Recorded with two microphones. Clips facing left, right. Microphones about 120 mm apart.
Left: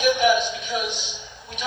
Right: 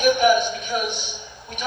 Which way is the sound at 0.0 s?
50° right (ahead or behind).